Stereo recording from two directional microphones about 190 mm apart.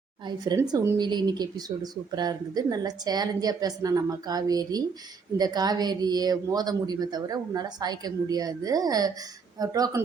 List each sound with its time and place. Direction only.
0.3 s speech: 20° right (ahead or behind)